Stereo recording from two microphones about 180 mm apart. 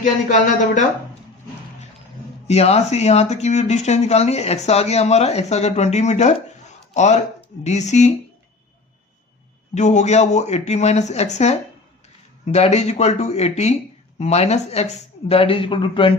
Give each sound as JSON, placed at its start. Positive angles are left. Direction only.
{"t": 0.0, "sound": "speech", "side_deg": 45}
{"t": 2.5, "sound": "speech", "side_deg": 35}
{"t": 9.7, "sound": "speech", "side_deg": 40}